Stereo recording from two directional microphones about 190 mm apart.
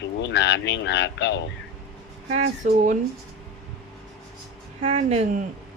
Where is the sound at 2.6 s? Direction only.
40° right (ahead or behind).